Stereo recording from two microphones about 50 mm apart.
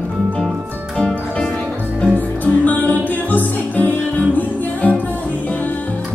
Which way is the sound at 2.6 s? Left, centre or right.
Left.